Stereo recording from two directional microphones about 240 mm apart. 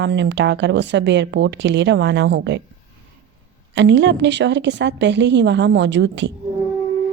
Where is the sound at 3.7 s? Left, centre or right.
Right.